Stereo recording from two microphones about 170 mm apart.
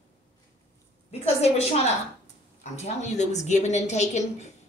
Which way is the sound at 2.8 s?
45° left (ahead or behind).